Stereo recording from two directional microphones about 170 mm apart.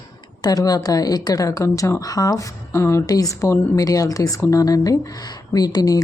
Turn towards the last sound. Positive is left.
turn(degrees=20)  # may be behind; listen again after turning